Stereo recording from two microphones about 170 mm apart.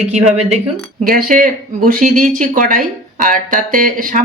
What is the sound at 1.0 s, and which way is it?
Speech, 55° right (ahead or behind).